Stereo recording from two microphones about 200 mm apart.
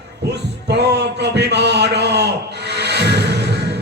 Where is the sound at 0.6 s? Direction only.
55° right (ahead or behind).